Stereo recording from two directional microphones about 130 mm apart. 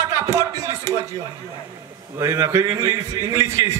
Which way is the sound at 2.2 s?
20° right (ahead or behind).